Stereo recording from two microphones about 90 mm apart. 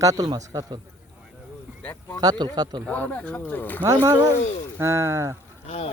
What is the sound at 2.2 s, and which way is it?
Speech, 50° right (ahead or behind).